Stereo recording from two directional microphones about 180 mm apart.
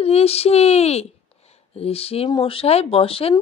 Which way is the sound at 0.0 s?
35° left (ahead or behind).